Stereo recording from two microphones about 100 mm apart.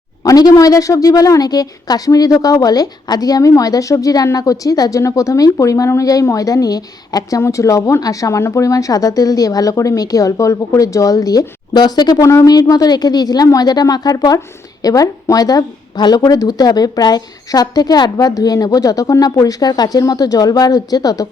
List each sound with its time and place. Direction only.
0.2 s speech: 40° left (ahead or behind)
12.2 s speech: 30° left (ahead or behind)